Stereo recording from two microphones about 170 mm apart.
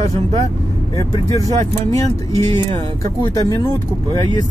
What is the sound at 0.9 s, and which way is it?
Speech, 20° left (ahead or behind).